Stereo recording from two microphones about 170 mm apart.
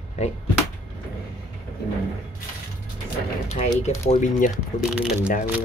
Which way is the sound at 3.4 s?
40° left (ahead or behind).